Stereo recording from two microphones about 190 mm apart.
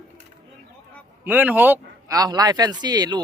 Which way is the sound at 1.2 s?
10° right (ahead or behind).